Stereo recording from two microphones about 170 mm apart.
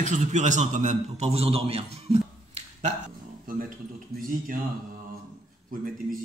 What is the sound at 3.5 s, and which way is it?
A man's voice, 55° right (ahead or behind).